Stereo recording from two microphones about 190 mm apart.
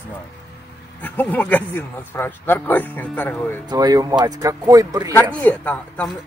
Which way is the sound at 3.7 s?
20° right (ahead or behind).